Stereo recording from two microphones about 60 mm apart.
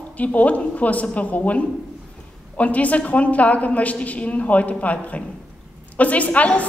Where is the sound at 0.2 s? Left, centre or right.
Left.